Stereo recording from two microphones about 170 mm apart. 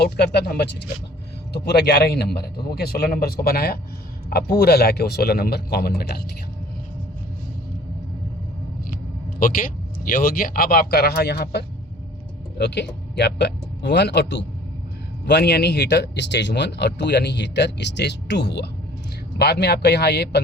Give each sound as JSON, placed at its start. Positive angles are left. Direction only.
{"t": 0.0, "sound": "a man's voice", "side_deg": 75}
{"t": 9.4, "sound": "speech", "side_deg": 55}
{"t": 15.2, "sound": "speech", "side_deg": 75}